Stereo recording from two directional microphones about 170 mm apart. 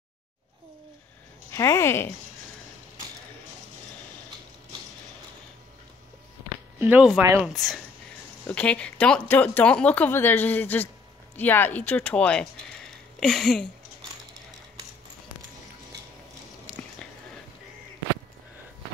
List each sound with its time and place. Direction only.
1.5 s speech: 15° left (ahead or behind)
6.8 s speech: 10° right (ahead or behind)
7.5 s speech: centre (ahead or behind)
16.7 s a sound: 10° left (ahead or behind)